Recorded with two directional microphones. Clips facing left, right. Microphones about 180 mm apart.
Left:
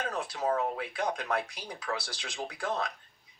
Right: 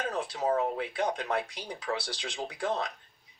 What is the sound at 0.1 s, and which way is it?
Speech, 25° right (ahead or behind).